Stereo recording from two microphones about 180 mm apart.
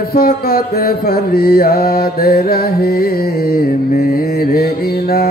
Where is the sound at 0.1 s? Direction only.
55° left (ahead or behind).